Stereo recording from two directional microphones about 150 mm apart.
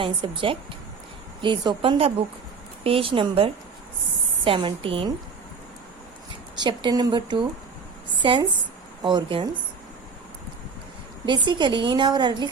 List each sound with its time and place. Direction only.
0.0 s a woman's voice: 35° right (ahead or behind)
6.6 s a woman's voice: 30° right (ahead or behind)
11.3 s a woman's voice: 30° right (ahead or behind)